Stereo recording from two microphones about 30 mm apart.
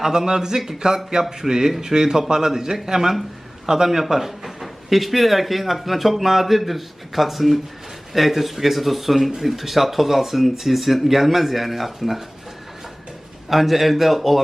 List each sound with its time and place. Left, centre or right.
0.0 s a man's voice: centre
13.5 s speech: centre